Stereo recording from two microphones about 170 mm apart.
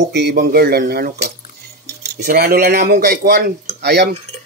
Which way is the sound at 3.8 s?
75° right (ahead or behind).